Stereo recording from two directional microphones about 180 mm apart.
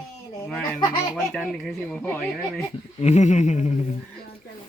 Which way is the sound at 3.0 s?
40° left (ahead or behind).